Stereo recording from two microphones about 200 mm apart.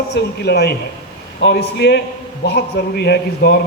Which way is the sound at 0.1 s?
55° left (ahead or behind).